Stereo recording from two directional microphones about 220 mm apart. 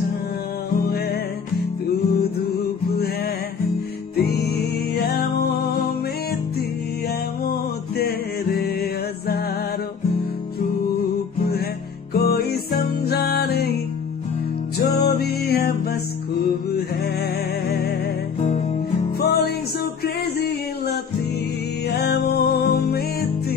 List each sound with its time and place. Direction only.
4.2 s music: 45° left (ahead or behind)
8.0 s music: 45° left (ahead or behind)
11.3 s music: 45° left (ahead or behind)
14.8 s music: 45° left (ahead or behind)
17.6 s music: 45° left (ahead or behind)
19.1 s music: 45° left (ahead or behind)